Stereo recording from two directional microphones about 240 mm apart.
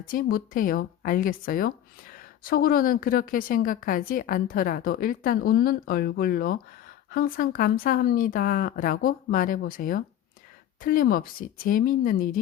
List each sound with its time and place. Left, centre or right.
0.0 s a woman's voice: left